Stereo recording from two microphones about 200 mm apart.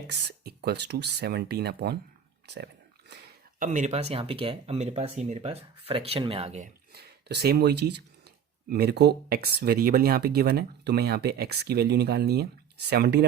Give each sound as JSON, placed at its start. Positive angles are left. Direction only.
{"t": 0.1, "sound": "speech", "side_deg": -55}
{"t": 3.1, "sound": "a sound", "side_deg": -55}
{"t": 3.6, "sound": "speech", "side_deg": -35}
{"t": 6.9, "sound": "speech", "side_deg": -55}